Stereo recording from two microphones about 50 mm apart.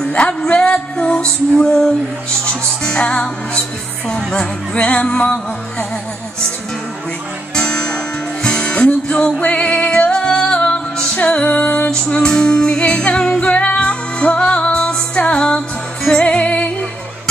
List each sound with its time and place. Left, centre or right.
0.1 s music: centre
7.5 s music: centre